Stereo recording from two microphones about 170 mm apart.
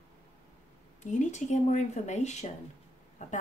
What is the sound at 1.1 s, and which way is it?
Speech, 45° left (ahead or behind).